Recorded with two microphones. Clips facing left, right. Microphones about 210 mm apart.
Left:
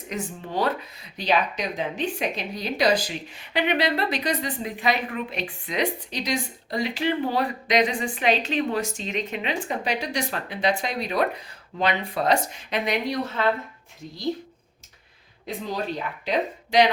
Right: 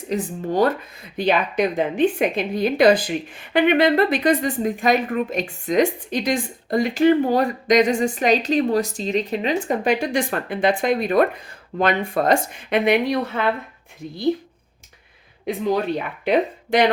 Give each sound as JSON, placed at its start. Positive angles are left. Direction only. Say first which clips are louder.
{"t": 0.1, "sound": "speech", "louder": "right 7 dB", "side_deg": -40}
{"t": 15.4, "sound": "speech", "louder": "right 8 dB", "side_deg": -60}